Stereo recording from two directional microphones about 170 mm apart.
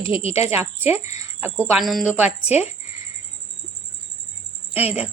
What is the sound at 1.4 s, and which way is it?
Speech, 10° right (ahead or behind).